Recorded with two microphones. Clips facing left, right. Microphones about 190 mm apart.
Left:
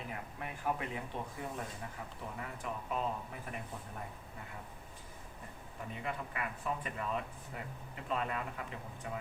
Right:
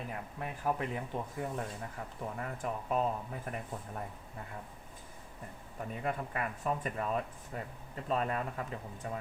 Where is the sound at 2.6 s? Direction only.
45° right (ahead or behind).